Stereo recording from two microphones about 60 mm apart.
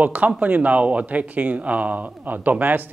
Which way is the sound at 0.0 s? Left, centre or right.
Right.